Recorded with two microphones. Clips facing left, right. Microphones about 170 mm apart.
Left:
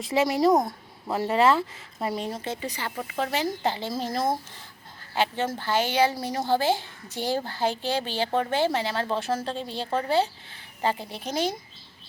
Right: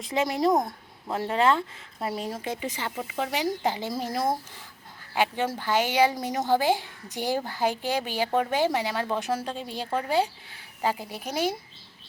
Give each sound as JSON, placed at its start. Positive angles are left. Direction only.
{"t": 0.0, "sound": "speech", "side_deg": 0}
{"t": 2.4, "sound": "speech", "side_deg": -15}